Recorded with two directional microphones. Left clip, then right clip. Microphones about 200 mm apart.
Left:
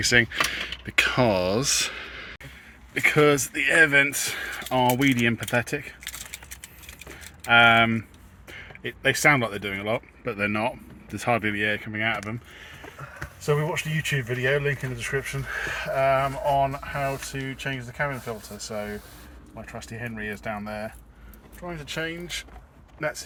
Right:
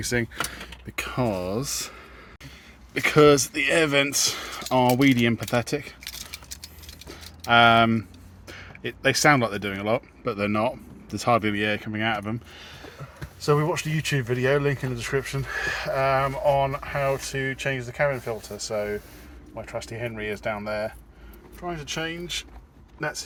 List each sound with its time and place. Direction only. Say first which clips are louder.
0.0 s speech: left 7 dB; centre (ahead or behind)
7.4 s speech: even; 15° right (ahead or behind)
15.6 s speech: left 1 dB; 40° right (ahead or behind)
17.6 s speech: right 4 dB; 40° right (ahead or behind)
18.0 s speech: right 5 dB; 30° right (ahead or behind); by 22.4 s 45° right (ahead or behind)